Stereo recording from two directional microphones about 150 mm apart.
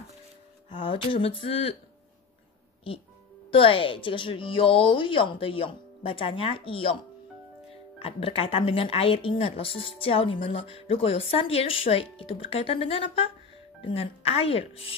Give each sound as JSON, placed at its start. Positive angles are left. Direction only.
{"t": 0.7, "sound": "speech", "side_deg": 35}
{"t": 3.5, "sound": "speech", "side_deg": 35}
{"t": 8.0, "sound": "speech", "side_deg": 40}